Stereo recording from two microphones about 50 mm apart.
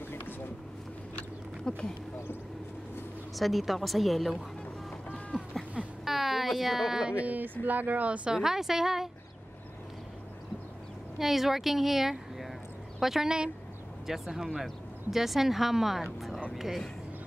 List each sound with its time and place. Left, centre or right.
1.1 s a sound: left
3.3 s speech: centre
5.1 s a sound: centre
6.0 s speech: centre
7.2 s speech: right
8.3 s a woman's voice: centre
11.1 s a woman's voice: centre
16.5 s vehicle: centre